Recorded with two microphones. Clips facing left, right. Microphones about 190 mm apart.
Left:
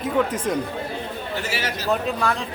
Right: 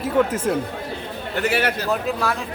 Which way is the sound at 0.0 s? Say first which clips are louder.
Right 2 dB; 5° right (ahead or behind).